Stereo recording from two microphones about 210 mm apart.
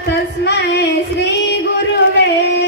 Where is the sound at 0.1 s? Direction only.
50° left (ahead or behind).